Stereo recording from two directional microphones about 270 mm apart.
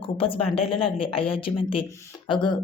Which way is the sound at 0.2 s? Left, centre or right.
Left.